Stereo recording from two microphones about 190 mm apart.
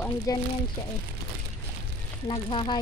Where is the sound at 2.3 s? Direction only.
25° left (ahead or behind).